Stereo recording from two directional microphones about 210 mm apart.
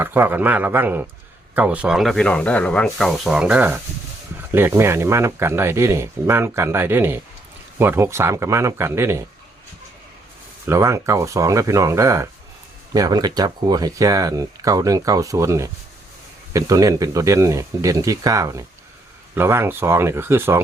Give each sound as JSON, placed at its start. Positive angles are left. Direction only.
{"t": 0.0, "sound": "speech", "side_deg": -10}
{"t": 10.7, "sound": "speech", "side_deg": -15}